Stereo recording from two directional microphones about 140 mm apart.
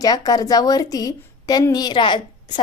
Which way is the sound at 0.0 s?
25° left (ahead or behind).